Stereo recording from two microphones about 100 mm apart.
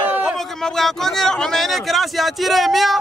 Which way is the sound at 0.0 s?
15° right (ahead or behind).